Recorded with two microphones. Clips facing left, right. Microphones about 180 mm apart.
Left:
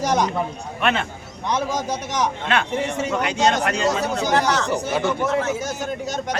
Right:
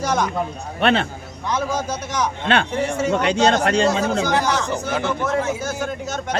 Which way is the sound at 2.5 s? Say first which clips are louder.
Right 2 dB; 35° right (ahead or behind).